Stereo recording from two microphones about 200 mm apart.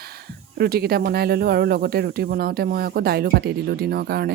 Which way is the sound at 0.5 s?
50° right (ahead or behind).